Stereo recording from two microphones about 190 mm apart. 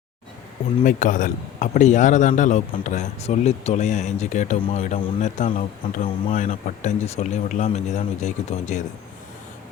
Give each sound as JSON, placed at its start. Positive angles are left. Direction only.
{"t": 0.9, "sound": "speech", "side_deg": 45}